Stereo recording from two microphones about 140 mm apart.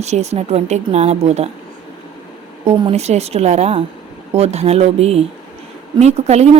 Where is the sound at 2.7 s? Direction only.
35° right (ahead or behind).